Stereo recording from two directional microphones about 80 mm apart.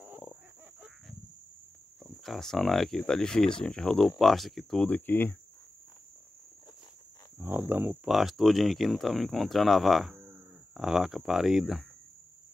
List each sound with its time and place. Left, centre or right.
2.0 s speech: centre
4.8 s speech: left
7.3 s cricket: right
8.0 s speech: centre
10.1 s livestock: right
10.7 s speech: centre